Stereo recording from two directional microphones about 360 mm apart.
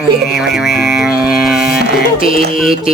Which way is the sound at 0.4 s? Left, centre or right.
Centre.